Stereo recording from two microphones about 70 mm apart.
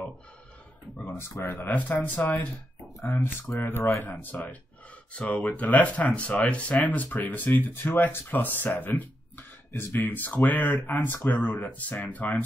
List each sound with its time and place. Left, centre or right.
1.4 s speech: left
3.0 s speech: left